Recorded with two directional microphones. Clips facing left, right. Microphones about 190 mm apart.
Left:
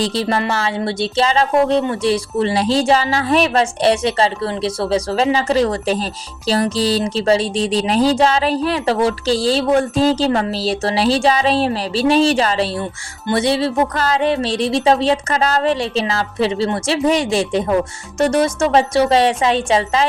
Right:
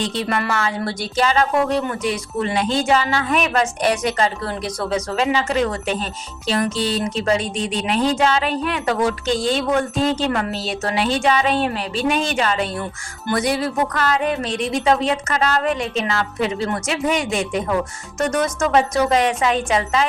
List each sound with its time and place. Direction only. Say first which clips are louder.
0.0 s speech: left 4 dB; 35° left (ahead or behind)